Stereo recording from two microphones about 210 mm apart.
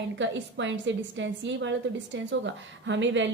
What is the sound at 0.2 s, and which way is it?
A woman's voice, 60° right (ahead or behind).